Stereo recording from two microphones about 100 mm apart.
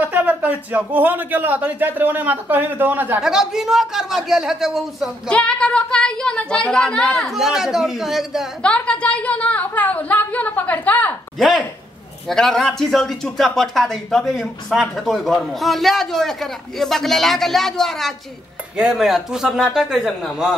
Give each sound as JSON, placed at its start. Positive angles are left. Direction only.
{"t": 0.0, "sound": "a man's voice", "side_deg": -15}
{"t": 3.2, "sound": "speech", "side_deg": -5}
{"t": 5.3, "sound": "speech", "side_deg": 10}
{"t": 8.6, "sound": "speech", "side_deg": 10}
{"t": 11.3, "sound": "speech", "side_deg": 0}